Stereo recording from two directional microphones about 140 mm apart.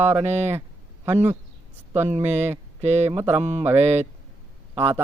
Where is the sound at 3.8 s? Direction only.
50° right (ahead or behind).